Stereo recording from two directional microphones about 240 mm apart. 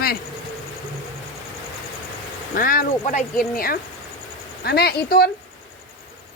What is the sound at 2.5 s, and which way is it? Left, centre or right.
Speech, left.